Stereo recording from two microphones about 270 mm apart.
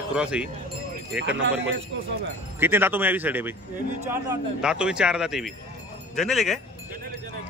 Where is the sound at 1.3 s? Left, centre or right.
Right.